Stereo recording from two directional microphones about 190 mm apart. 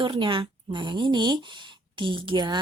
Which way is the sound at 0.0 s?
25° right (ahead or behind).